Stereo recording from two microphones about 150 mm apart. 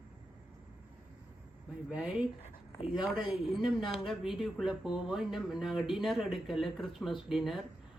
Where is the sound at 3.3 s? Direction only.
Centre (ahead or behind).